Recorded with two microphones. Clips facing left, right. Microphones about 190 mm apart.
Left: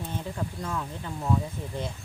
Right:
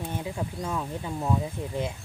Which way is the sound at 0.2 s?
15° right (ahead or behind).